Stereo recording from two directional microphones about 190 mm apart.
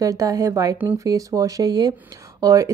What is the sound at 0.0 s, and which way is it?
Speech, 15° right (ahead or behind).